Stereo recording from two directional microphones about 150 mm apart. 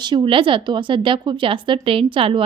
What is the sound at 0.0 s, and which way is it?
A woman's voice, 30° right (ahead or behind).